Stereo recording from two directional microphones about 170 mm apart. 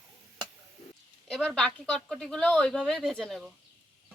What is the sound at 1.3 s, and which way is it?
Speech, 5° left (ahead or behind).